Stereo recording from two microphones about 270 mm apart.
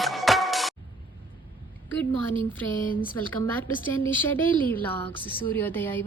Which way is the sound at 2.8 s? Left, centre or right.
Left.